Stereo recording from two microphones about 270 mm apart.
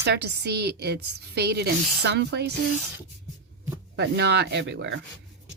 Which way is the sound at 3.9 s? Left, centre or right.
Right.